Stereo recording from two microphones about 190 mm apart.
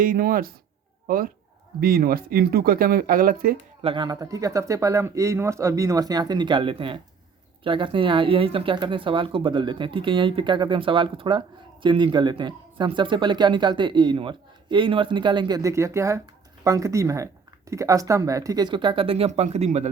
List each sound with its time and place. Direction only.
0.0 s speech: 50° right (ahead or behind)
3.8 s speech: 25° right (ahead or behind)